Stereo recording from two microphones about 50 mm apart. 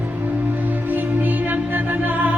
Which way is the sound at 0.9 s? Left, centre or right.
Right.